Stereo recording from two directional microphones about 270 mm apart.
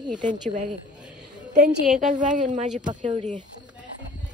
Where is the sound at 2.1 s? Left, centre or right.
Right.